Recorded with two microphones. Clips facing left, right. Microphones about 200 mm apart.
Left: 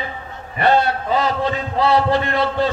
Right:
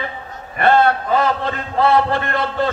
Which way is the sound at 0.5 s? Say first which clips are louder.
Right 2 dB; 55° right (ahead or behind).